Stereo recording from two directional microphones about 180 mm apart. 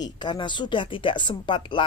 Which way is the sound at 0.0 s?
25° left (ahead or behind).